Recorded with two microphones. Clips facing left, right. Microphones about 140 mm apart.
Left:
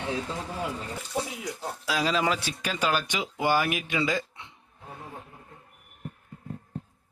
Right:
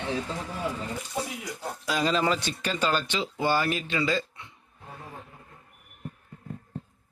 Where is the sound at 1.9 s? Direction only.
5° left (ahead or behind); by 4.5 s 20° left (ahead or behind).